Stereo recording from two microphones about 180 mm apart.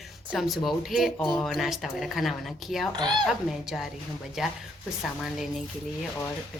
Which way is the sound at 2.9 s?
25° right (ahead or behind).